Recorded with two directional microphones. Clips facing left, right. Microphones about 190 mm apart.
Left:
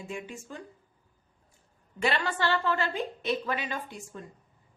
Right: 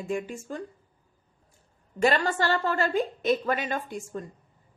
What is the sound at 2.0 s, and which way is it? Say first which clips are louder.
A woman's voice: right 5 dB; 45° right (ahead or behind).